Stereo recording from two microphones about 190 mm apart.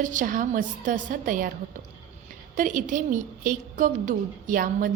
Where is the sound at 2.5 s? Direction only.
45° right (ahead or behind).